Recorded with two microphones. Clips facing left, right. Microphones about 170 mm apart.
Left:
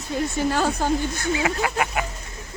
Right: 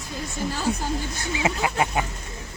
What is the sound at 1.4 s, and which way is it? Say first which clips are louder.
Speech: even; 25° right (ahead or behind).